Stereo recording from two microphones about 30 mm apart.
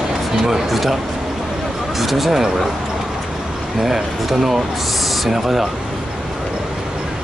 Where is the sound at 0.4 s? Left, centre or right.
Centre.